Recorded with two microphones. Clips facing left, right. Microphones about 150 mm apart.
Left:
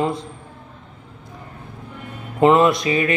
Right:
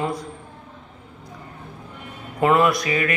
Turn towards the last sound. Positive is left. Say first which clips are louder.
# left 3 dB
turn(degrees=25)  # may be behind; listen again after turning